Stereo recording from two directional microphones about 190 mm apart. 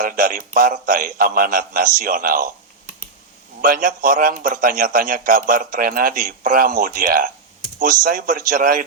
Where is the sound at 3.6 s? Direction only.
45° right (ahead or behind).